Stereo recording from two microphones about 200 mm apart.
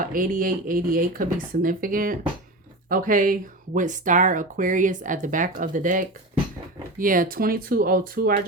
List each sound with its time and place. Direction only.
0.0 s speech: 45° right (ahead or behind)